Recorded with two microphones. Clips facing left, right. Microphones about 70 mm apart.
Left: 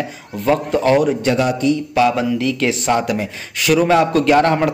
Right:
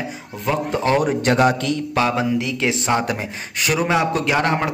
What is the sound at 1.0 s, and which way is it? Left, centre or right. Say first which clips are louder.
Speech: even; right.